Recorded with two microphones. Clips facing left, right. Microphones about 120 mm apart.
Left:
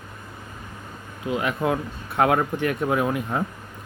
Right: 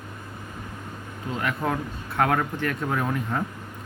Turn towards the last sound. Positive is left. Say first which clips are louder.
# left 3 dB
turn(degrees=10)  # may be behind; listen again after turning